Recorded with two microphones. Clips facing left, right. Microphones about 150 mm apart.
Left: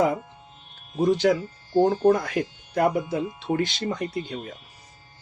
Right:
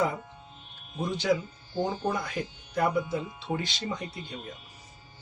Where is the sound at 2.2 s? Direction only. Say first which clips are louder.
Left 7 dB; 70° left (ahead or behind).